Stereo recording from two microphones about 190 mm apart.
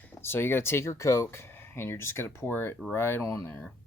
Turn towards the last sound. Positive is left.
turn(degrees=10)  # may be behind; listen again after turning